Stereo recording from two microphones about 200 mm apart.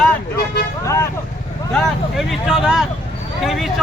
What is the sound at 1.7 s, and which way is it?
Speech, centre (ahead or behind).